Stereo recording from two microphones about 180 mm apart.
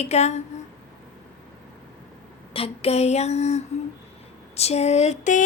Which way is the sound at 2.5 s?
35° left (ahead or behind).